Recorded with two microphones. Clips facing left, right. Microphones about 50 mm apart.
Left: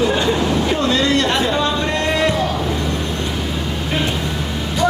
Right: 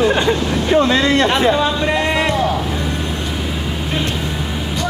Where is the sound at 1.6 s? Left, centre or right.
Centre.